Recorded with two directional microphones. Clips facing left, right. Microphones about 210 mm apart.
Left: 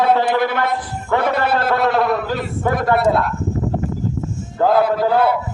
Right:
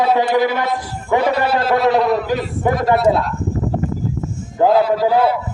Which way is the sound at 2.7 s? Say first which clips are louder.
Right 1 dB; 55° left (ahead or behind).